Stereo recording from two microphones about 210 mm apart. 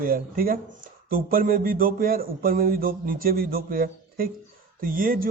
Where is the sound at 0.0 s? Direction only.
45° right (ahead or behind).